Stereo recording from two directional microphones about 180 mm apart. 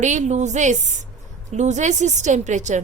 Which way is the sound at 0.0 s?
40° right (ahead or behind).